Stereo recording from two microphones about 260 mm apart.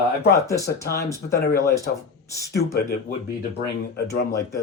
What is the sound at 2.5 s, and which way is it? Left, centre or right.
Speech, left.